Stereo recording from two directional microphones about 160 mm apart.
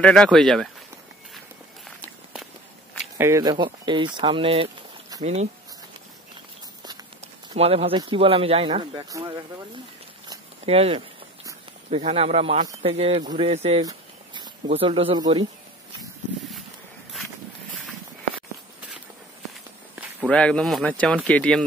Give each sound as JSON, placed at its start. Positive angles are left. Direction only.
{"t": 0.0, "sound": "speech", "side_deg": 5}
{"t": 3.2, "sound": "speech", "side_deg": -20}
{"t": 7.5, "sound": "speech", "side_deg": -40}
{"t": 10.6, "sound": "speech", "side_deg": -40}
{"t": 13.8, "sound": "speech", "side_deg": -30}
{"t": 20.2, "sound": "speech", "side_deg": 5}